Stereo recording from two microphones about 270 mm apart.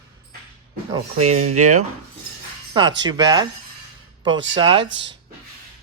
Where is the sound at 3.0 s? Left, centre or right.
Centre.